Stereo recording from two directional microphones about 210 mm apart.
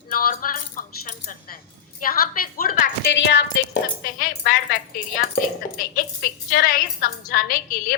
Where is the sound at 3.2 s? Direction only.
60° left (ahead or behind).